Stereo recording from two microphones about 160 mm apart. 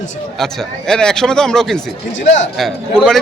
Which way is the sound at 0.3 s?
5° left (ahead or behind).